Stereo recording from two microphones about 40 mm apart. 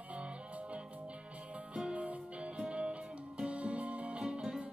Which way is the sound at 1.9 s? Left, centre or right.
Right.